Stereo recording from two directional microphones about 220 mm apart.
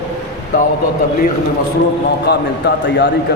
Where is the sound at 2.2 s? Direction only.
50° left (ahead or behind).